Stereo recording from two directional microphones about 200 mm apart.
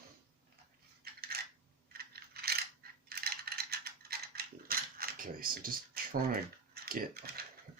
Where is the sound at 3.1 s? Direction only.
50° right (ahead or behind).